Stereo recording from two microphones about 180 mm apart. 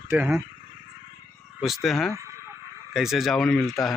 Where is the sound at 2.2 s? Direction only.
15° right (ahead or behind).